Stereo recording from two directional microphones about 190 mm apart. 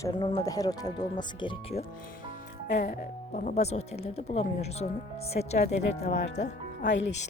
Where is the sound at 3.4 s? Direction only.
40° left (ahead or behind).